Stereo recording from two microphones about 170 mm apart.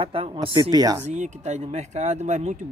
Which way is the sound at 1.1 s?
45° right (ahead or behind).